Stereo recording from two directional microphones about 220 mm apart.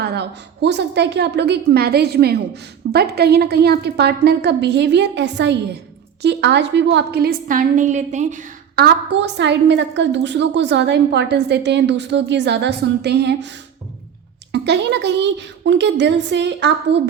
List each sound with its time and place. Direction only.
0.0 s a woman's voice: 50° right (ahead or behind)